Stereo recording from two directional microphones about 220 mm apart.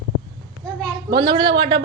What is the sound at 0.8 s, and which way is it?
A woman's voice, 20° right (ahead or behind).